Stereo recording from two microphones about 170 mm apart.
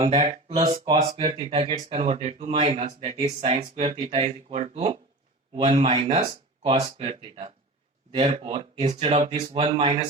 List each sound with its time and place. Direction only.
0.0 s speech: 35° right (ahead or behind)